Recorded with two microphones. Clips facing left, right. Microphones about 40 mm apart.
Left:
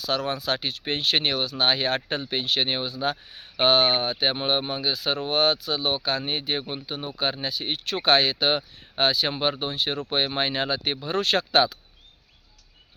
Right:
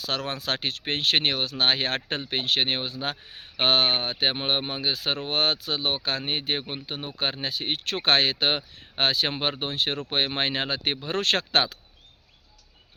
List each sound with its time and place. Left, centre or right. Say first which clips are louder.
0.0 s speech: left 3 dB; right